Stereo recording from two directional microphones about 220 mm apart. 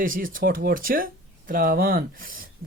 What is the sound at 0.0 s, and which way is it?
Speech, 40° right (ahead or behind).